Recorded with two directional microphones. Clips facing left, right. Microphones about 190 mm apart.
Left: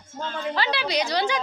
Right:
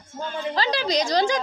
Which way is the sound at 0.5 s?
40° right (ahead or behind).